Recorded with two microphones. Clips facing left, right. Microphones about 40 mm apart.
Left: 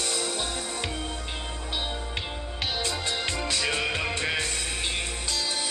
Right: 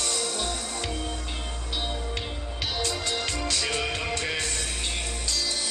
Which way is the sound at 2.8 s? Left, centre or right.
Centre.